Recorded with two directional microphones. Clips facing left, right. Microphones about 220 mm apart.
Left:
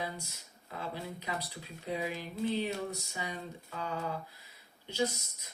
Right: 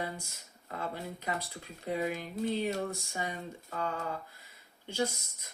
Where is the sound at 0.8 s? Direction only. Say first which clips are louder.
Right 1 dB; 50° right (ahead or behind).